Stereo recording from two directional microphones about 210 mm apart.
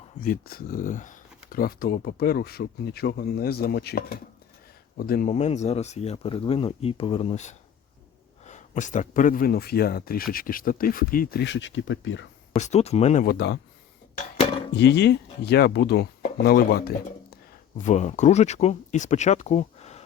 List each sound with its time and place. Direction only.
0.2 s speech: 45° left (ahead or behind); by 12.3 s 60° left (ahead or behind)
12.5 s speech: 30° left (ahead or behind)
13.2 s speech: 50° left (ahead or behind)
14.8 s speech: 55° left (ahead or behind)
17.7 s speech: 35° left (ahead or behind)